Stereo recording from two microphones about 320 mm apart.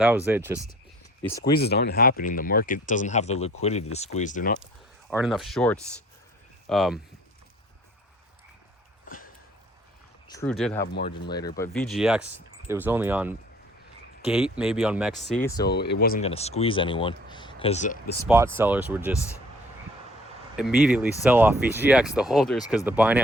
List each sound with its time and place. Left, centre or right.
0.0 s speech: centre
1.2 s speech: centre
1.5 s speech: left
5.1 s speech: centre
9.0 s sniff: left
10.3 s speech: centre
15.6 s speech: left
18.2 s speech: centre
20.8 s speech: centre